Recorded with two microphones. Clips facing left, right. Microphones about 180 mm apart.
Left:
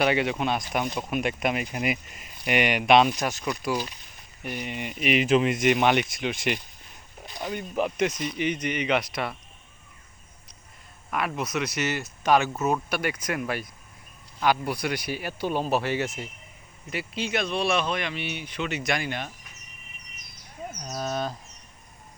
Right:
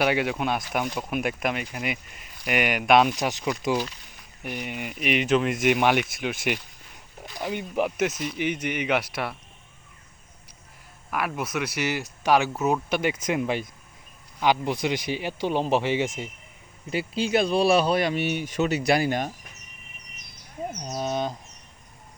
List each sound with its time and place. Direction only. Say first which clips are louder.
0.0 s speech: even; 5° right (ahead or behind)
3.2 s speech: right 2 dB; 15° right (ahead or behind)
4.6 s speech: left 2 dB; 5° right (ahead or behind)
7.6 s speech: even; 10° right (ahead or behind)
11.1 s speech: even; 5° right (ahead or behind)
16.9 s speech: right 5 dB; 30° right (ahead or behind)
20.7 s speech: right 2 dB; 25° right (ahead or behind)